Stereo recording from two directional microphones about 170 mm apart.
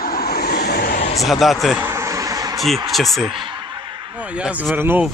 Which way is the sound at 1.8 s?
15° right (ahead or behind).